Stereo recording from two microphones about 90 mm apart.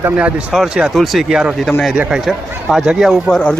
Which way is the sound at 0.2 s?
15° right (ahead or behind).